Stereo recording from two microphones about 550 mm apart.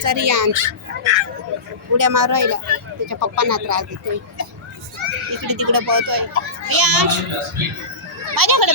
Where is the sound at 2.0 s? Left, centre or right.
Right.